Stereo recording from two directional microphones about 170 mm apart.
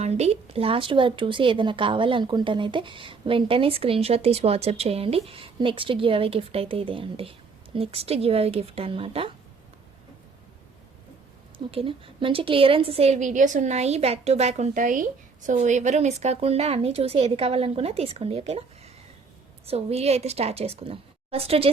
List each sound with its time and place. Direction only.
0.0 s speech: 40° right (ahead or behind)
11.5 s speech: 30° right (ahead or behind)
19.6 s speech: 35° right (ahead or behind)